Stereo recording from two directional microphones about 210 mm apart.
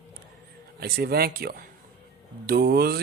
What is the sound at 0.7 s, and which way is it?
Speech, 50° right (ahead or behind).